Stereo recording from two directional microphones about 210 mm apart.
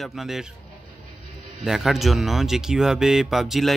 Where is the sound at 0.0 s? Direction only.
Centre (ahead or behind).